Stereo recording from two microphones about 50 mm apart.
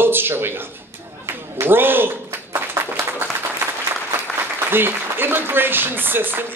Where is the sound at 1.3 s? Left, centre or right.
Right.